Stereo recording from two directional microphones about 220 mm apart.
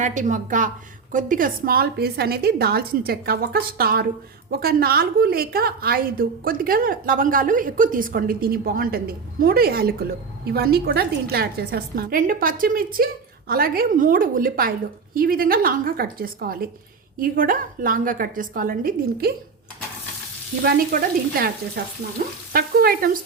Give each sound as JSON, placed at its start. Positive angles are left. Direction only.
{"t": 0.0, "sound": "a woman's voice", "side_deg": -35}
{"t": 20.7, "sound": "a woman's voice", "side_deg": -45}